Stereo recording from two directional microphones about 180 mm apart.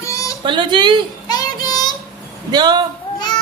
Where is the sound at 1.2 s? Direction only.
20° left (ahead or behind).